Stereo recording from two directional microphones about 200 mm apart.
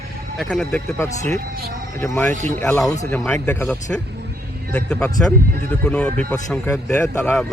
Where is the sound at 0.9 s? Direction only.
15° left (ahead or behind).